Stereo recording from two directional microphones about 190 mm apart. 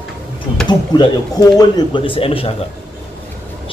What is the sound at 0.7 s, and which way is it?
Speech, 20° left (ahead or behind).